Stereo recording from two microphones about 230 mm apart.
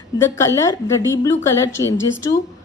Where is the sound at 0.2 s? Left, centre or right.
Centre.